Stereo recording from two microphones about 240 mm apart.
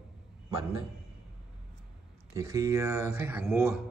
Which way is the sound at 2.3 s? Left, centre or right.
Centre.